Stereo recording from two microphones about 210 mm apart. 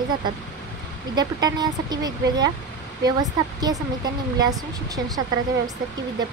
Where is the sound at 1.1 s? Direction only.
20° right (ahead or behind).